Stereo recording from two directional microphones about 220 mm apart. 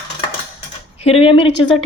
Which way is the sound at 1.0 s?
25° left (ahead or behind).